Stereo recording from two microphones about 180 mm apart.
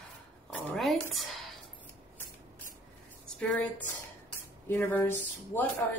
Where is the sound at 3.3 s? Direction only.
5° left (ahead or behind).